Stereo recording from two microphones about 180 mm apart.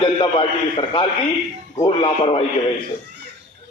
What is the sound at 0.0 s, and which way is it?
A man's voice, 30° left (ahead or behind).